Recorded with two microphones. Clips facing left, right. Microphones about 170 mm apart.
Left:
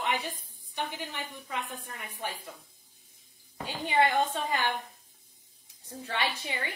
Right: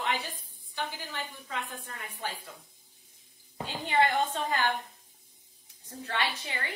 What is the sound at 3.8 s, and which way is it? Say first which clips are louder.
Speech: left 1 dB; 15° left (ahead or behind).